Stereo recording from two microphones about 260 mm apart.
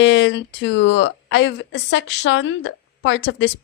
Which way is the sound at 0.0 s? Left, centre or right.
Left.